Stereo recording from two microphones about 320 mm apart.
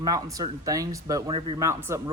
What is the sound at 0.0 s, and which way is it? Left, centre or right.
A man's voice, centre.